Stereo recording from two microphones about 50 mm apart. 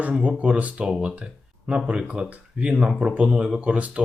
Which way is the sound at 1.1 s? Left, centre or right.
Right.